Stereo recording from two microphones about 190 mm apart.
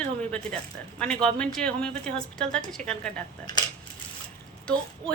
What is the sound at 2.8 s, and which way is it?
Speech, 40° right (ahead or behind).